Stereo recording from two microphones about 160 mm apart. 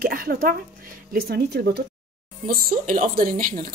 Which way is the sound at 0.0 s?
65° right (ahead or behind).